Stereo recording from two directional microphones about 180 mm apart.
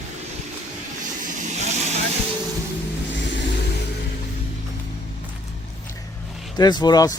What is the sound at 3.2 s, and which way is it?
Vehicle, 80° left.